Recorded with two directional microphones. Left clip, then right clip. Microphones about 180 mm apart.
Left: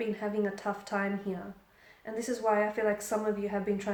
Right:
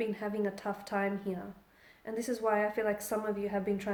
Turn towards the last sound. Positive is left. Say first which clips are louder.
# left 1 dB
turn(degrees=-40)  # may be behind; listen again after turning